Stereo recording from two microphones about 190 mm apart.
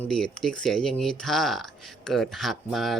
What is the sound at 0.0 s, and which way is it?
Speech, 5° left (ahead or behind).